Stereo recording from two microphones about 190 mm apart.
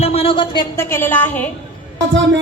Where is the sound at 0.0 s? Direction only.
30° left (ahead or behind).